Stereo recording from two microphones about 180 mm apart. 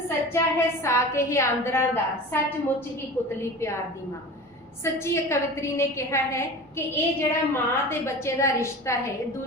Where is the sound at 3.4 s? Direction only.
15° left (ahead or behind).